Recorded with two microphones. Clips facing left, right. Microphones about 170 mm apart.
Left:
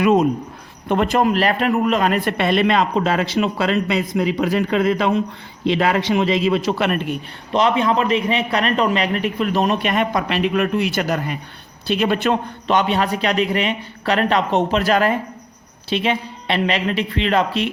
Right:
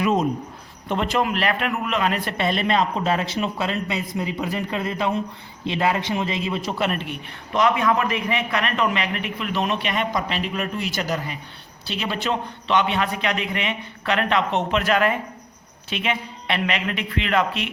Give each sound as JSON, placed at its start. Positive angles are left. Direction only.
{"t": 0.0, "sound": "speech", "side_deg": 65}
{"t": 0.9, "sound": "a man's voice", "side_deg": 50}
{"t": 7.5, "sound": "a man's voice", "side_deg": 30}